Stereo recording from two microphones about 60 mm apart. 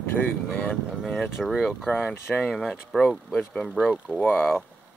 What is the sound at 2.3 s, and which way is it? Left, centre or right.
Speech, centre.